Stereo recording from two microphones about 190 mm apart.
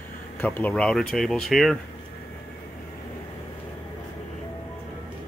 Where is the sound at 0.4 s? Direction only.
10° left (ahead or behind).